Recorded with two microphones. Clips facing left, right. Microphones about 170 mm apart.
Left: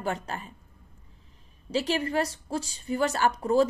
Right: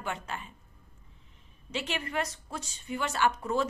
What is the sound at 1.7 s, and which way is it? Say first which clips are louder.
A woman's voice: left 8 dB; 35° left (ahead or behind).